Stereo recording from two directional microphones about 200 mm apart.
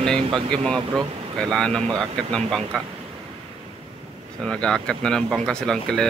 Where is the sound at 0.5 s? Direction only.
5° left (ahead or behind).